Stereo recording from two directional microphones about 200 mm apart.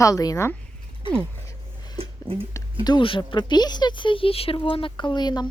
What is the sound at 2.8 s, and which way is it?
Speech, 25° left (ahead or behind).